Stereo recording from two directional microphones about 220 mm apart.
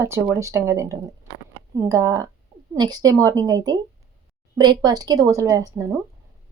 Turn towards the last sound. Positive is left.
turn(degrees=-15)  # may be behind; listen again after turning